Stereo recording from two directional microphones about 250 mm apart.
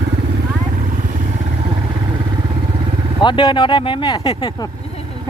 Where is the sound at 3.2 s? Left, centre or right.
Centre.